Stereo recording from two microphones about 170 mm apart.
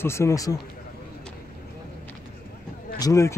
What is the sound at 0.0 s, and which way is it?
Speech, 15° left (ahead or behind).